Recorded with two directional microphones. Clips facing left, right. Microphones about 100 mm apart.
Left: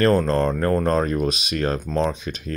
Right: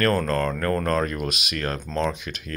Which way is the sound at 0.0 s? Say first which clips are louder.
Left 4 dB; 25° left (ahead or behind).